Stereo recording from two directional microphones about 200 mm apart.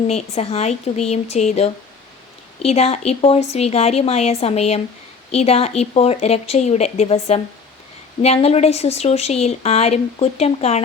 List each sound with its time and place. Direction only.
0.1 s speech: 30° left (ahead or behind)